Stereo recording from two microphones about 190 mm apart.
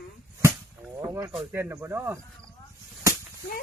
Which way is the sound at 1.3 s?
5° right (ahead or behind).